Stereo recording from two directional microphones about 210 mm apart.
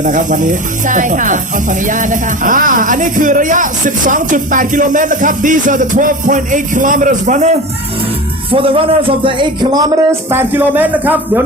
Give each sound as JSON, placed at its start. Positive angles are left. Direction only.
{"t": 0.0, "sound": "speech", "side_deg": -40}
{"t": 8.6, "sound": "speech", "side_deg": -25}